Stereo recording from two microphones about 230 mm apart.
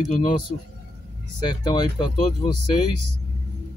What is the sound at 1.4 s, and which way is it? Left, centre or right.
Speech, centre.